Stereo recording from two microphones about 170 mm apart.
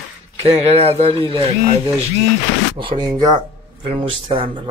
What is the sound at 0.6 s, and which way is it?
Speech, 40° right (ahead or behind).